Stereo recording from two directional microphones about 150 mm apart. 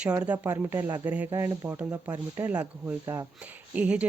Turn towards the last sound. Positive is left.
turn(degrees=-10)  # may be behind; listen again after turning